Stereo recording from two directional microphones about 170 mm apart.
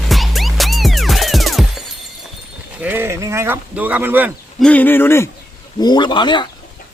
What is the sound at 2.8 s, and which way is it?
Sheep, 10° right (ahead or behind).